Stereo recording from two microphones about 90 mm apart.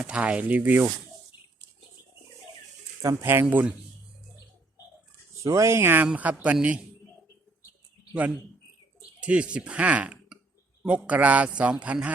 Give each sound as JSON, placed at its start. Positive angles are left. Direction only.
{"t": 0.0, "sound": "a man's voice", "side_deg": -10}
{"t": 3.0, "sound": "speech", "side_deg": -35}
{"t": 5.4, "sound": "a man's voice", "side_deg": -35}
{"t": 9.2, "sound": "a man's voice", "side_deg": -15}